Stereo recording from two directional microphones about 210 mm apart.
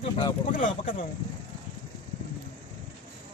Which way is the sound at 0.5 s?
40° left (ahead or behind).